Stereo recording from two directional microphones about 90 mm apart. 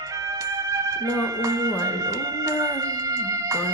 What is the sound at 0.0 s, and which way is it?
Music, 35° right (ahead or behind).